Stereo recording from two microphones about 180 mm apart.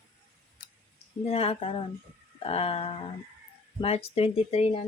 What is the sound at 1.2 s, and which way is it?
Speech, 35° left (ahead or behind).